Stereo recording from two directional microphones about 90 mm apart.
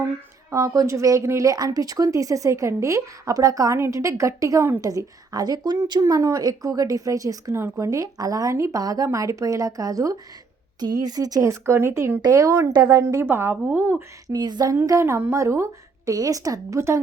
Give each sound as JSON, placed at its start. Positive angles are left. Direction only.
{"t": 0.5, "sound": "speech", "side_deg": -40}
{"t": 12.2, "sound": "speech", "side_deg": -40}
{"t": 13.2, "sound": "speech", "side_deg": -25}
{"t": 14.3, "sound": "speech", "side_deg": -50}
{"t": 14.7, "sound": "speech", "side_deg": -35}